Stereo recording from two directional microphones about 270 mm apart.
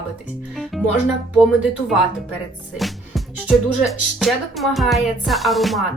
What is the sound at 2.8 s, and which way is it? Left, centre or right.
Music, centre.